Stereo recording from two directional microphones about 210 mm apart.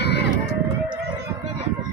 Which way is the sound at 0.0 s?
55° left (ahead or behind).